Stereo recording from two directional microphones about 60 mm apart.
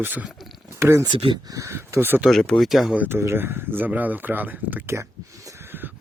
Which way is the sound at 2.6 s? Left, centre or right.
Centre.